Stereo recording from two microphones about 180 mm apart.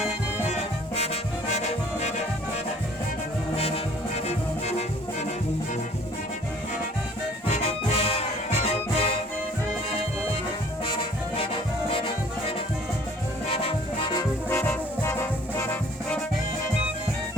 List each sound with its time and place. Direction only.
0.4 s music: 35° left (ahead or behind)
3.6 s music: 35° left (ahead or behind)
7.5 s music: 35° left (ahead or behind)
11.3 s music: 30° left (ahead or behind)
14.5 s brass instrument: 10° left (ahead or behind)